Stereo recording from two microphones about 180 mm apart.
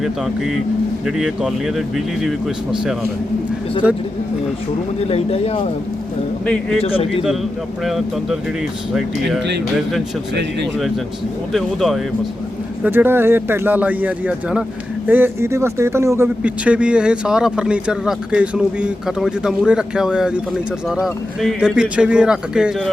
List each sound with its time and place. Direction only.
1.0 s speech: 5° right (ahead or behind)
3.8 s speech: 5° right (ahead or behind)
5.0 s speech: 35° left (ahead or behind)
6.4 s speech: 5° left (ahead or behind)
6.8 s speech: 30° left (ahead or behind)
7.9 s speech: centre (ahead or behind)
11.5 s speech: centre (ahead or behind)
12.8 s speech: 10° right (ahead or behind)